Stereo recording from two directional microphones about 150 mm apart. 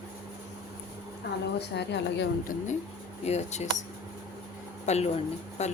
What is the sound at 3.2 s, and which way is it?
Speech, 45° left (ahead or behind).